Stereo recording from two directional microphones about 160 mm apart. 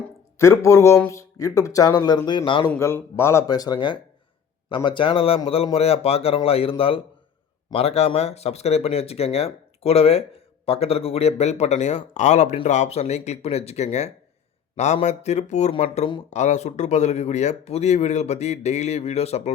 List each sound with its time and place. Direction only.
0.6 s speech: 15° left (ahead or behind); by 2.7 s 30° left (ahead or behind)
2.7 s speech: 15° left (ahead or behind); by 19.5 s 40° left (ahead or behind)